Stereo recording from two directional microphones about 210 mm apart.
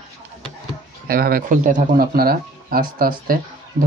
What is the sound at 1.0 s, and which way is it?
Speech, 45° right (ahead or behind).